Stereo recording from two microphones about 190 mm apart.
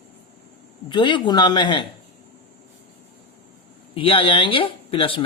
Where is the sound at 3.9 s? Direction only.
25° left (ahead or behind).